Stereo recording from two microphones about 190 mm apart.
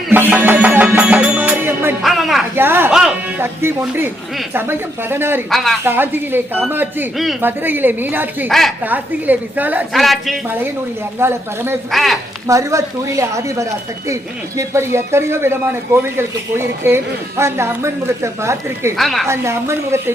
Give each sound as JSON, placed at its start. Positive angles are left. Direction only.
{"t": 0.1, "sound": "music", "side_deg": -10}
{"t": 2.0, "sound": "speech", "side_deg": 0}
{"t": 2.6, "sound": "speech", "side_deg": -10}
{"t": 5.5, "sound": "speech", "side_deg": 0}
{"t": 5.8, "sound": "speech", "side_deg": -10}
{"t": 8.4, "sound": "speech", "side_deg": 0}
{"t": 11.2, "sound": "speech", "side_deg": -10}
{"t": 11.9, "sound": "speech", "side_deg": 0}
{"t": 12.5, "sound": "speech", "side_deg": -15}
{"t": 18.9, "sound": "speech", "side_deg": 0}
{"t": 19.3, "sound": "speech", "side_deg": -15}